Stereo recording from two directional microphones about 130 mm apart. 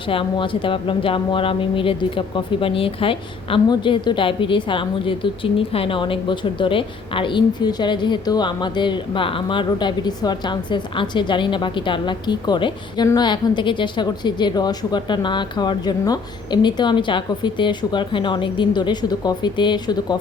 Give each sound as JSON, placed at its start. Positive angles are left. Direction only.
{"t": 0.1, "sound": "speech", "side_deg": 40}